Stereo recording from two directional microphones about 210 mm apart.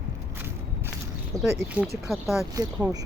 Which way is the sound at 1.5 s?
10° right (ahead or behind).